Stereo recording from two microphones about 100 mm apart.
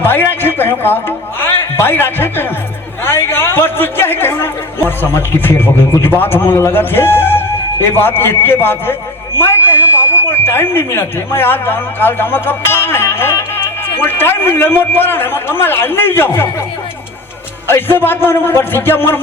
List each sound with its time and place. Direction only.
0.0 s a man's voice: 20° left (ahead or behind)
17.7 s a man's voice: 20° left (ahead or behind)